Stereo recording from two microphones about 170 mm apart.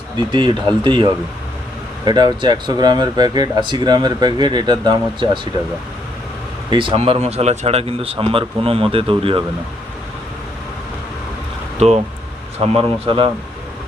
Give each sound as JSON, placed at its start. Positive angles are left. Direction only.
{"t": 0.3, "sound": "speech", "side_deg": -30}
{"t": 6.7, "sound": "speech", "side_deg": -30}
{"t": 11.8, "sound": "speech", "side_deg": -40}